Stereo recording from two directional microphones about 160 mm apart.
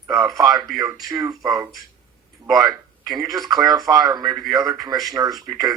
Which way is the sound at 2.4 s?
Centre (ahead or behind).